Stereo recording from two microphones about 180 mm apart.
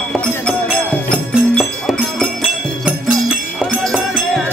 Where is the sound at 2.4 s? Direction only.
5° right (ahead or behind).